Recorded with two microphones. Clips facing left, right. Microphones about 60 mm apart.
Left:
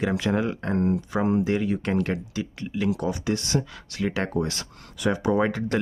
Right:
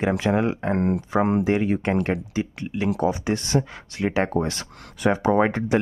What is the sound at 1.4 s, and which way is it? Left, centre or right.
Speech, right.